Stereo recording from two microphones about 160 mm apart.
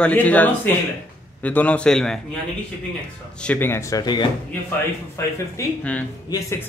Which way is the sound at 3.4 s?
10° left (ahead or behind).